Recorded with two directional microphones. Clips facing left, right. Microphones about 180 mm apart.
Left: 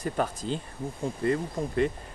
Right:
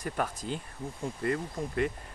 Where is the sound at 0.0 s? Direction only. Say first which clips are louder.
Left 4 dB; 30° left (ahead or behind).